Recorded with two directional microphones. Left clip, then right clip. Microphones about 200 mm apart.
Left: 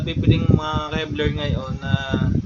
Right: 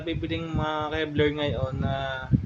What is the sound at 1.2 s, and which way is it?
Speech, 20° right (ahead or behind).